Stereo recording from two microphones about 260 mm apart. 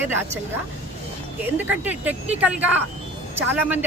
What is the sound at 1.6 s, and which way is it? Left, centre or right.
Speech, centre.